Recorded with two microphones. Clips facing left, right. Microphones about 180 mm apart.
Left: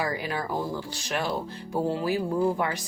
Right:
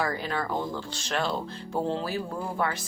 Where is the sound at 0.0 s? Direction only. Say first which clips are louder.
Even; 15° left (ahead or behind).